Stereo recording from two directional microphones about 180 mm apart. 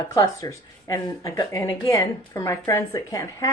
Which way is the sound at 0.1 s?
15° left (ahead or behind).